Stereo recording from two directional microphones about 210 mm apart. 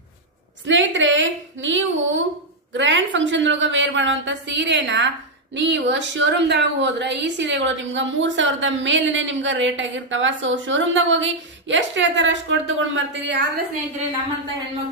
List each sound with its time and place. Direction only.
0.7 s a woman's voice: 60° right (ahead or behind)